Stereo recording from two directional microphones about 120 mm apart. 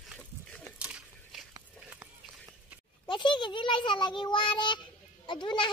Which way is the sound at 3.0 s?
40° left (ahead or behind).